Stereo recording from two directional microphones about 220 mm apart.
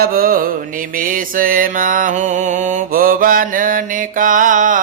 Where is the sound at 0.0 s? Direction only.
40° right (ahead or behind).